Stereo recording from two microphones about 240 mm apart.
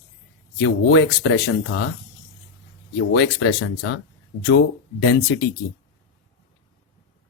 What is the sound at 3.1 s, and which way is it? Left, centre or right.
Speech, left.